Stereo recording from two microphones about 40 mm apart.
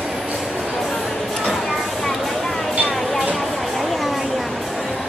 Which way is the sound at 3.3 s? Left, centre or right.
Centre.